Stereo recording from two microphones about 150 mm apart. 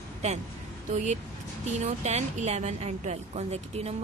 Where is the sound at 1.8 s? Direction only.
50° right (ahead or behind).